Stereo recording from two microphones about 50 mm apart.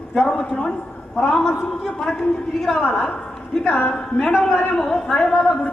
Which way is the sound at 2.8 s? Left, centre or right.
Left.